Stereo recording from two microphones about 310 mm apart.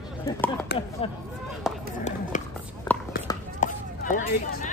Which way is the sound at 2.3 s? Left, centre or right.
Left.